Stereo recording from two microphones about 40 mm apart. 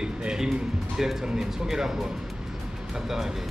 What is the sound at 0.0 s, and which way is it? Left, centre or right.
Music, centre.